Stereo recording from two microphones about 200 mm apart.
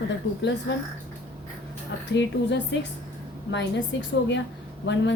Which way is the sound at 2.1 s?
60° left (ahead or behind).